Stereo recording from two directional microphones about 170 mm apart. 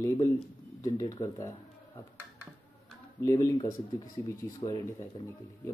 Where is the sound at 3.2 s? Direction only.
20° left (ahead or behind).